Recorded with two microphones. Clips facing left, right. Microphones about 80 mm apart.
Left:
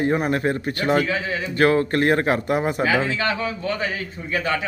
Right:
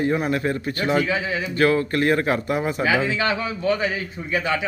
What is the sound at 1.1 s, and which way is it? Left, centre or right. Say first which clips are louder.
Speech: right 1 dB; centre.